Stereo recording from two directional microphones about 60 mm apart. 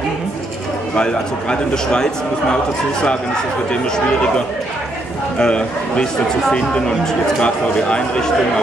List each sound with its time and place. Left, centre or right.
0.9 s a man's voice: centre
5.4 s a man's voice: centre
7.3 s a man's voice: centre